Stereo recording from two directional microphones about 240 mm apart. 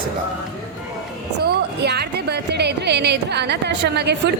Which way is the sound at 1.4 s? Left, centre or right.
Right.